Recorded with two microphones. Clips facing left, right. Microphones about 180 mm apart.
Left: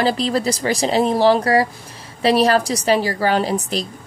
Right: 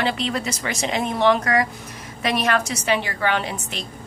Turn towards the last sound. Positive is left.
turn(degrees=35)  # may be behind; listen again after turning